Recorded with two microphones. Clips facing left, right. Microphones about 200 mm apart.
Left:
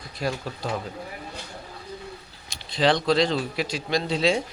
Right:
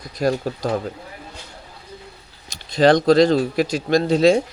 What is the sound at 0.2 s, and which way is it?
Speech, 45° right (ahead or behind).